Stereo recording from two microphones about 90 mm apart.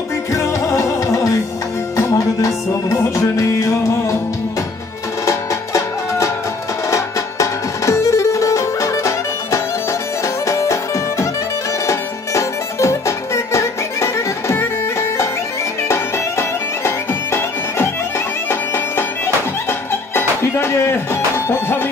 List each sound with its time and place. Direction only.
0.3 s music: 35° left (ahead or behind)
5.2 s music: 35° left (ahead or behind)
18.5 s bagpipes: 25° left (ahead or behind)
19.9 s music: 25° left (ahead or behind)